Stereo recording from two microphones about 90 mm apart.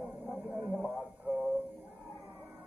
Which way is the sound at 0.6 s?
10° left (ahead or behind).